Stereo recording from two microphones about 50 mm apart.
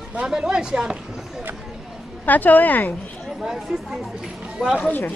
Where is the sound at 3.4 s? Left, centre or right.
Centre.